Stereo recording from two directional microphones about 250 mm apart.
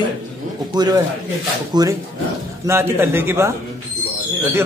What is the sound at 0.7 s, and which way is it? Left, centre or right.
A man's voice, centre.